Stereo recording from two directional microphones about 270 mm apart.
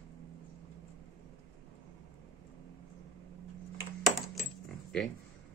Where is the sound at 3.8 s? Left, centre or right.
Centre.